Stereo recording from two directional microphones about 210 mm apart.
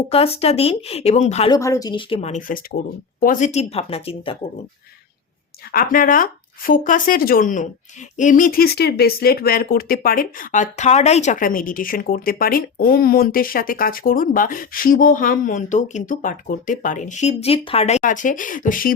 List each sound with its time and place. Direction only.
0.1 s speech: 30° left (ahead or behind)
1.5 s speech: 15° left (ahead or behind)
5.7 s speech: 40° left (ahead or behind)